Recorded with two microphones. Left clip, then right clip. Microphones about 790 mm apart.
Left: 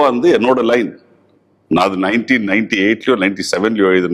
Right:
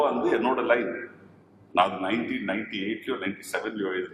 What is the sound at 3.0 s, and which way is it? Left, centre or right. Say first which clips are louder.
Speech: left 17 dB; left.